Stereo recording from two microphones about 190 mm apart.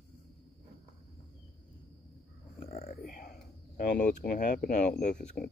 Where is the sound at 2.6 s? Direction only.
35° left (ahead or behind).